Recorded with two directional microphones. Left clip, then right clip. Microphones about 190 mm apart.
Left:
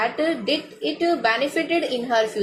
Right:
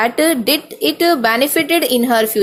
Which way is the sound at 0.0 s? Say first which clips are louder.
Right 8 dB; 55° right (ahead or behind).